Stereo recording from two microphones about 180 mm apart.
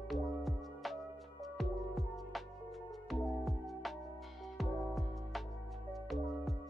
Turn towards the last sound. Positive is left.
turn(degrees=0)  # may be behind; listen again after turning